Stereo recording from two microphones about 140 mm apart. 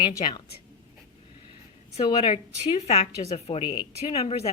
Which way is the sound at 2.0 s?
45° left (ahead or behind).